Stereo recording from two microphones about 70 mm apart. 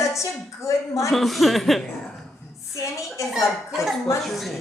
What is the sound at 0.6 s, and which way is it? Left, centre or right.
Speech, left.